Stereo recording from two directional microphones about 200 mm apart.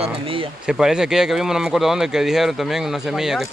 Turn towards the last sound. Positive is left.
turn(degrees=0)  # may be behind; listen again after turning